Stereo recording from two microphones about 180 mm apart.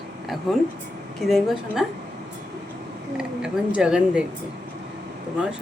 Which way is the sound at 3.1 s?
5° right (ahead or behind).